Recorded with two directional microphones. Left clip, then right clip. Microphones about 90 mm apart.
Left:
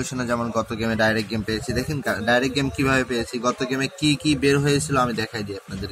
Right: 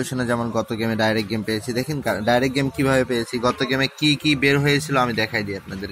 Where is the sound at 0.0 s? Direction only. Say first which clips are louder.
Right 2 dB; 45° right (ahead or behind).